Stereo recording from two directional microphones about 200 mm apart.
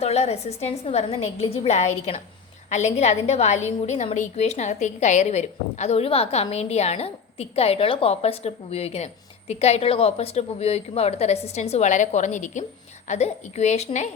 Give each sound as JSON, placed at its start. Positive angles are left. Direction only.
{"t": 0.0, "sound": "a woman's voice", "side_deg": 30}